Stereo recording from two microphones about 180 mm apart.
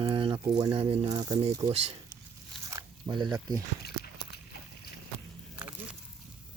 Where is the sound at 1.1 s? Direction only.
20° right (ahead or behind).